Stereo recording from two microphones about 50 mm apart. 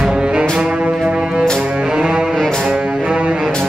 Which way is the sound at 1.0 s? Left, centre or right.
Centre.